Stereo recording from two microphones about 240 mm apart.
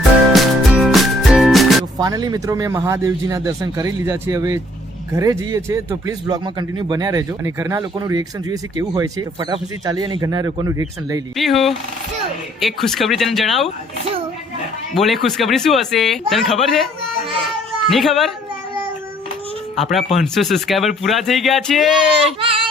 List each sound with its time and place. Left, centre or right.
0.3 s music: centre
2.0 s speech: centre
11.3 s speech: centre
14.9 s speech: centre
19.7 s speech: centre
22.3 s baby cry: right